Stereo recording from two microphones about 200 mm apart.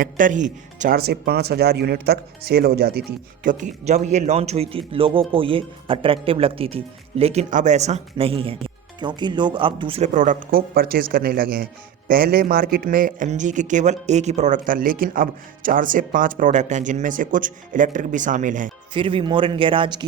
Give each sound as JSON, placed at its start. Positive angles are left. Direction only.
{"t": 0.0, "sound": "speech", "side_deg": -40}
{"t": 10.2, "sound": "speech", "side_deg": -40}
{"t": 18.9, "sound": "a man's voice", "side_deg": -25}